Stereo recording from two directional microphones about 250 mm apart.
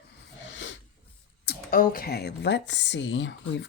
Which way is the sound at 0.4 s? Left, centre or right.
Left.